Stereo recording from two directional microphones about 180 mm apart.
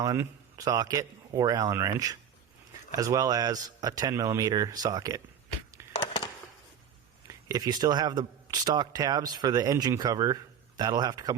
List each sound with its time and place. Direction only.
0.0 s a man's voice: 20° right (ahead or behind)
7.3 s speech: 20° right (ahead or behind)